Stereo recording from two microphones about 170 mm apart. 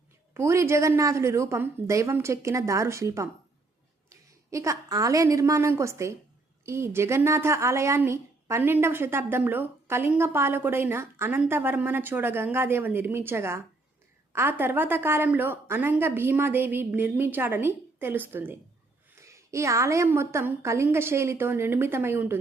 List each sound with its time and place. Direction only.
0.3 s a woman's voice: 15° right (ahead or behind)